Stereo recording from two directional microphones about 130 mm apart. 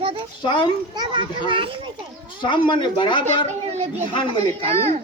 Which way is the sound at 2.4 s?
40° left (ahead or behind).